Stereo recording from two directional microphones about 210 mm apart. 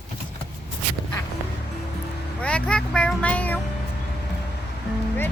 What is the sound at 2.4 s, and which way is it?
Speech, 5° left (ahead or behind).